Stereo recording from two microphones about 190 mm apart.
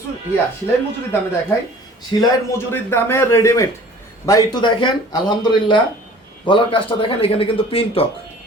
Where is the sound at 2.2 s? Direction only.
10° left (ahead or behind); by 8.0 s 30° left (ahead or behind).